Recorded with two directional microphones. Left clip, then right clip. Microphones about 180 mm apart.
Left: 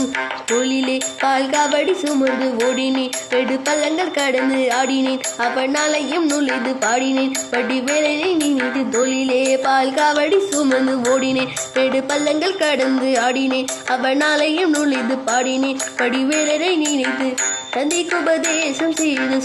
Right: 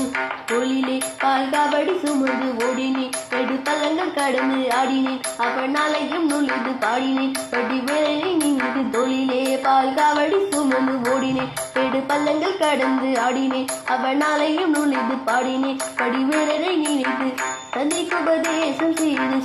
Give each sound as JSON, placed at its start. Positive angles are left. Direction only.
{"t": 9.5, "sound": "music", "side_deg": 25}
{"t": 13.1, "sound": "music", "side_deg": 25}
{"t": 16.0, "sound": "music", "side_deg": 55}